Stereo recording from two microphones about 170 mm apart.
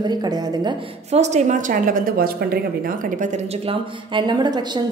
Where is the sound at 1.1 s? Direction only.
40° right (ahead or behind); by 2.6 s 60° right (ahead or behind).